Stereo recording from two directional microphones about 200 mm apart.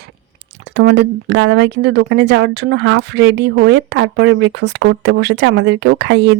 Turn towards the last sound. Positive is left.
turn(degrees=-60)  # may be behind; listen again after turning